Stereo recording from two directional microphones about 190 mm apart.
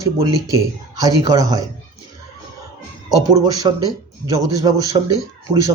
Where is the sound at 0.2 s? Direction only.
15° right (ahead or behind).